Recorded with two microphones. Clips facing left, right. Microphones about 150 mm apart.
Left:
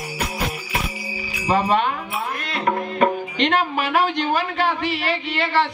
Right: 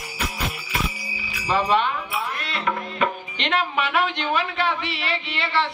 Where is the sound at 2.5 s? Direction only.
40° left (ahead or behind).